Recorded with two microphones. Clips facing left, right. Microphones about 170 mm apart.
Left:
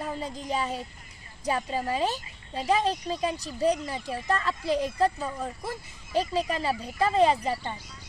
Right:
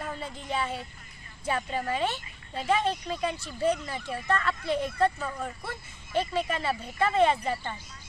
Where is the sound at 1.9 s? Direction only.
35° left (ahead or behind).